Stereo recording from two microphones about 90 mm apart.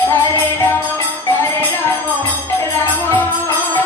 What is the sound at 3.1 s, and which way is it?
Music, 20° left (ahead or behind).